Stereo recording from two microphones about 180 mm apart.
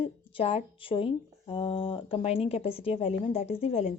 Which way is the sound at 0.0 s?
30° left (ahead or behind).